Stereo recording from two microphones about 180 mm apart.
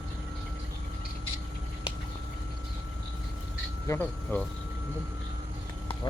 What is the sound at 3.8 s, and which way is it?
Speech, 10° left (ahead or behind).